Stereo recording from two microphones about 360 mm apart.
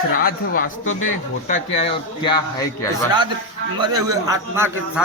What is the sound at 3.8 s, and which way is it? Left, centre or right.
A man's voice, centre.